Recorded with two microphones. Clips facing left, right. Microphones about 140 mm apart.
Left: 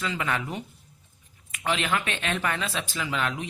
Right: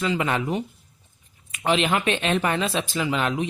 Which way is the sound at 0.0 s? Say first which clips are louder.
Right 5 dB; 20° right (ahead or behind).